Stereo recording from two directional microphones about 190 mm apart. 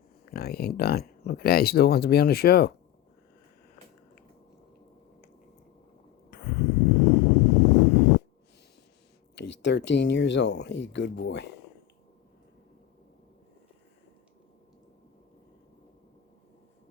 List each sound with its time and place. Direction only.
0.3 s speech: 55° left (ahead or behind)
6.3 s a sound: 55° left (ahead or behind)
9.3 s speech: 70° left (ahead or behind)